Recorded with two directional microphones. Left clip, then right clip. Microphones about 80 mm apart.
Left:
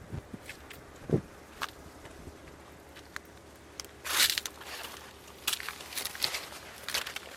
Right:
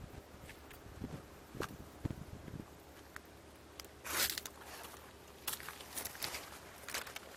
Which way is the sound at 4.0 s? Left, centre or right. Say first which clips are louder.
Left 10 dB; left.